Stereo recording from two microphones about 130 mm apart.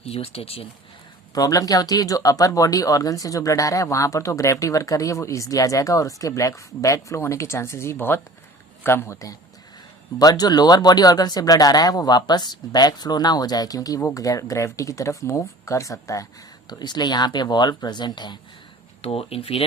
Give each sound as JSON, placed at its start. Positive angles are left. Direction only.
{"t": 0.0, "sound": "speech", "side_deg": 50}
{"t": 1.3, "sound": "speech", "side_deg": 30}
{"t": 19.0, "sound": "speech", "side_deg": 45}